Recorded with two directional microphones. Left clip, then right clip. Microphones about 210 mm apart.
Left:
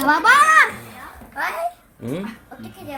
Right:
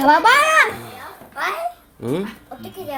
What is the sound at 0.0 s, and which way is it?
Music, 20° right (ahead or behind).